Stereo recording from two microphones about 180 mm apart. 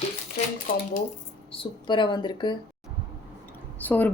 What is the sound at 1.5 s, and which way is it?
Speech, 25° left (ahead or behind).